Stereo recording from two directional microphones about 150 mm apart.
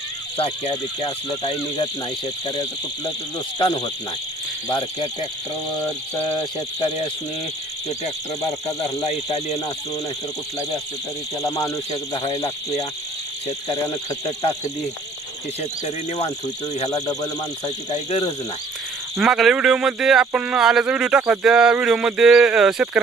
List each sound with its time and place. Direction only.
0.3 s speech: 40° left (ahead or behind)
6.4 s speech: 30° left (ahead or behind)
8.8 s speech: 45° left (ahead or behind)
11.4 s speech: 25° left (ahead or behind)
11.9 s speech: 40° left (ahead or behind)
13.7 s speech: 25° left (ahead or behind)
16.9 s speech: 25° left (ahead or behind)
19.1 s speech: 5° right (ahead or behind)